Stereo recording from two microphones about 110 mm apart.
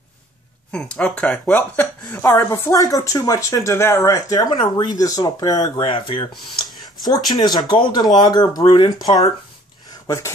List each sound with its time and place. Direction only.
0.7 s speech: 10° left (ahead or behind)
1.5 s speech: 20° left (ahead or behind)
2.2 s speech: 30° left (ahead or behind)
5.8 s speech: 50° left (ahead or behind)
6.3 s a sound: centre (ahead or behind)
7.1 s speech: 40° left (ahead or behind)
10.0 s speech: 30° left (ahead or behind)